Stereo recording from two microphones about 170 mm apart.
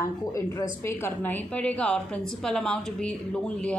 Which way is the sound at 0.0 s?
15° left (ahead or behind).